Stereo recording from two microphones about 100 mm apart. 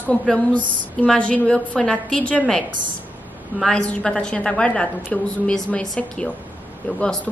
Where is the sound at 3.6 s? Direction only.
10° left (ahead or behind).